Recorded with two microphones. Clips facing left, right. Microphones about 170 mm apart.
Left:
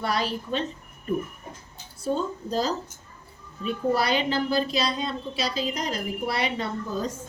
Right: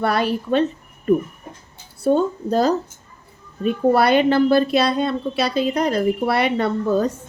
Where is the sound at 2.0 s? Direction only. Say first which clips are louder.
Right 9 dB; 60° right (ahead or behind).